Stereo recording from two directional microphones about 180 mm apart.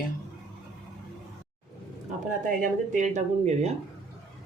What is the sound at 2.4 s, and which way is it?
Speech, 45° right (ahead or behind).